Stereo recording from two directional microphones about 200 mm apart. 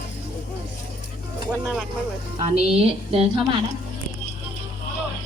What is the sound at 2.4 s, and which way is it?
Speech, 30° right (ahead or behind).